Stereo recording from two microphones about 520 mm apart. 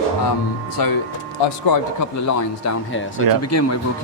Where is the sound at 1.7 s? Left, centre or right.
Left.